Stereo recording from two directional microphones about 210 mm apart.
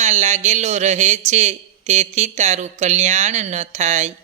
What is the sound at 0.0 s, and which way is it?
Speech, 35° right (ahead or behind).